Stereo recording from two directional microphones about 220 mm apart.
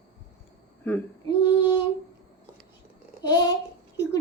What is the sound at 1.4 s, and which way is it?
Child singing, 20° left (ahead or behind).